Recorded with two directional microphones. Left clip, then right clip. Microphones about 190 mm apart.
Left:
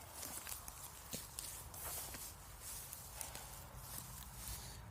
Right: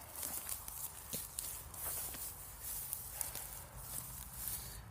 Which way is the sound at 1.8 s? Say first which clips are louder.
Right 2 dB; 10° right (ahead or behind).